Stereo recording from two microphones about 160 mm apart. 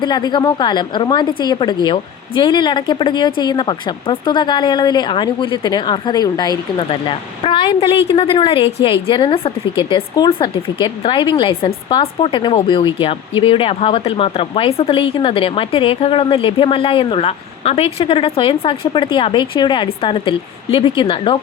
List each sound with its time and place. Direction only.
0.0 s a woman's voice: 25° left (ahead or behind)